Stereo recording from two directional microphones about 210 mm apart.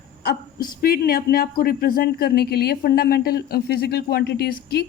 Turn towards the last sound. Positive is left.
turn(degrees=50)  # may be behind; listen again after turning